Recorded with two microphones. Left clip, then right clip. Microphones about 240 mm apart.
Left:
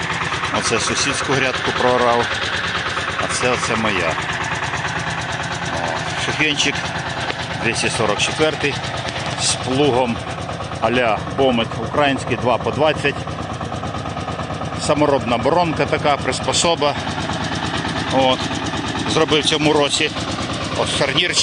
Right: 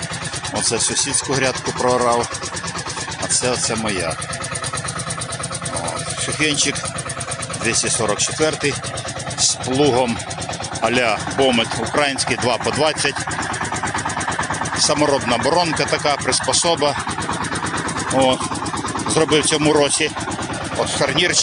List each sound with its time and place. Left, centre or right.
0.7 s speech: centre
3.4 s speech: centre
6.4 s speech: centre
14.8 s speech: centre
19.1 s speech: centre